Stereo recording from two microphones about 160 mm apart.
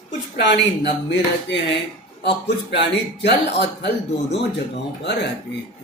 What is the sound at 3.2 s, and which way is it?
Speech, 90° left.